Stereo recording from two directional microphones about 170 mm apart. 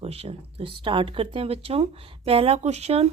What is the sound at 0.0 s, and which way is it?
Speech, 35° right (ahead or behind).